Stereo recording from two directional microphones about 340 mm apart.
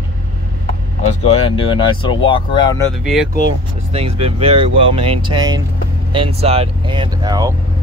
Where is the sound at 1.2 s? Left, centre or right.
Centre.